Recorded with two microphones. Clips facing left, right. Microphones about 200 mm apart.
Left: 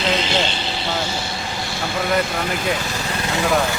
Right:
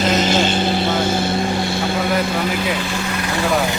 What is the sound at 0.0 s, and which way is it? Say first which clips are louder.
Vehicle: right 4 dB; 45° right (ahead or behind).